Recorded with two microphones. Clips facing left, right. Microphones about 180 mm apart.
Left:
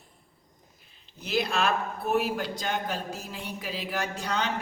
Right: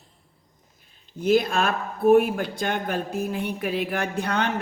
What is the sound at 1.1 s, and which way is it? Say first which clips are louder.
Speech: right 7 dB; 50° right (ahead or behind).